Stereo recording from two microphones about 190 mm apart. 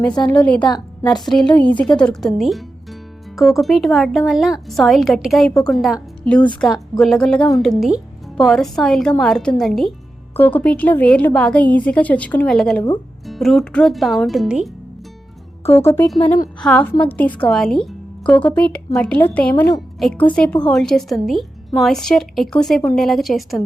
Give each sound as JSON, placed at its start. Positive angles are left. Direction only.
{"t": 0.6, "sound": "a woman's voice", "side_deg": 20}
{"t": 1.2, "sound": "a woman's voice", "side_deg": 0}
{"t": 15.7, "sound": "a woman's voice", "side_deg": 10}